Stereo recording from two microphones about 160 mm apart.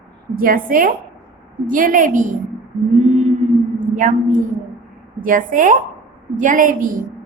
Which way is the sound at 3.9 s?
55° right (ahead or behind).